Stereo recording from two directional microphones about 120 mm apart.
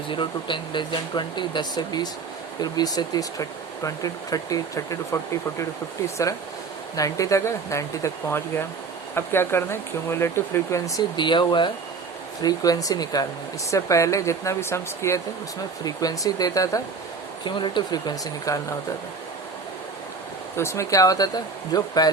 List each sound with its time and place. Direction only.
0.1 s speech: 40° left (ahead or behind); by 5.6 s 25° left (ahead or behind)
6.9 s speech: 30° left (ahead or behind)
11.2 s speech: 40° left (ahead or behind)
17.4 s speech: 40° left (ahead or behind)
20.6 s speech: 25° left (ahead or behind)